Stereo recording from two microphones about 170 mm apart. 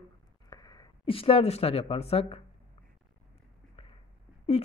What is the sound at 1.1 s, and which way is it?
Speech, 35° left (ahead or behind).